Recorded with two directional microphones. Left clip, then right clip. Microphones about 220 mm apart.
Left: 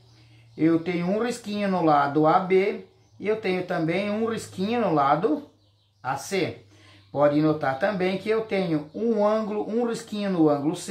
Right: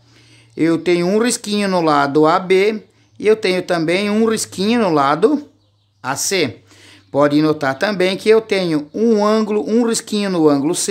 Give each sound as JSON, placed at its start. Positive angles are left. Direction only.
{"t": 0.6, "sound": "speech", "side_deg": -50}